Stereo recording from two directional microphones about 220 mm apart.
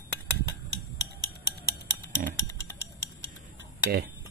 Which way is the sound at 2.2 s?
40° right (ahead or behind).